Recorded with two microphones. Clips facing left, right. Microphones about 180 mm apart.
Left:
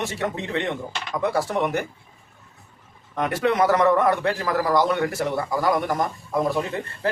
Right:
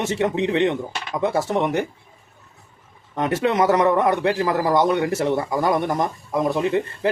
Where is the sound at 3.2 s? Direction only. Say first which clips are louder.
Right 1 dB; 25° right (ahead or behind).